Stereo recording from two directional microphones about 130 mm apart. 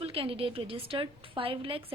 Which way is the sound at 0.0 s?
45° right (ahead or behind).